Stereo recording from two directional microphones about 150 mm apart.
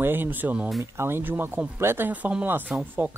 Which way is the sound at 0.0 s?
15° right (ahead or behind).